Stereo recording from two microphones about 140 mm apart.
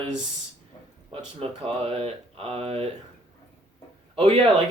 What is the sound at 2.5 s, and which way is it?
Speech, 45° right (ahead or behind).